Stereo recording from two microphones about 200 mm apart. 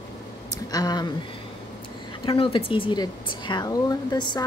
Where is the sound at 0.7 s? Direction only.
20° left (ahead or behind).